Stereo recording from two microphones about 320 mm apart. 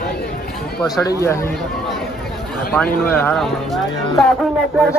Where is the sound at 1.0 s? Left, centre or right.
Centre.